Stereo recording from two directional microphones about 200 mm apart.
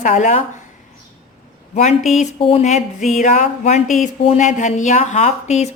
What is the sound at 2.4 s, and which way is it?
Speech, 30° left (ahead or behind).